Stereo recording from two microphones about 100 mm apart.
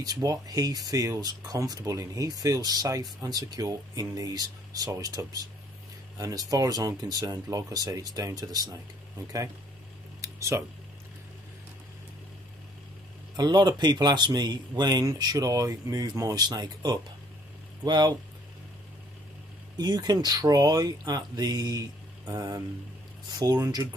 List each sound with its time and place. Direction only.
0.0 s speech: 40° right (ahead or behind)
10.2 s a sound: 30° right (ahead or behind)
13.4 s speech: 45° right (ahead or behind)
19.8 s speech: 45° right (ahead or behind)